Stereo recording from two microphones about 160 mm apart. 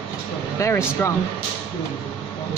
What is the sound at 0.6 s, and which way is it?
Speech, 20° left (ahead or behind).